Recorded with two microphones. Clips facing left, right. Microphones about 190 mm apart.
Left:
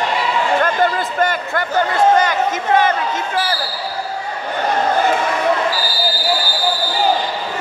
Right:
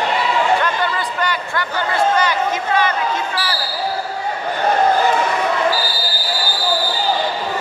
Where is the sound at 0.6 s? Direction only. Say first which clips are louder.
Left 4 dB; 45° left (ahead or behind).